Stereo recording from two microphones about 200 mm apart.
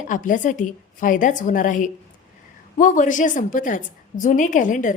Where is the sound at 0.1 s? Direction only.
40° left (ahead or behind).